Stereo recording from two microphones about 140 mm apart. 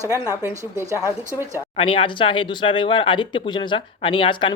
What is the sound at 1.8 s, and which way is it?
Speech, 40° left (ahead or behind).